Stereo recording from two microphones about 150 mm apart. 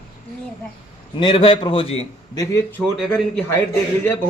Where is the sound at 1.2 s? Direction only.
35° left (ahead or behind).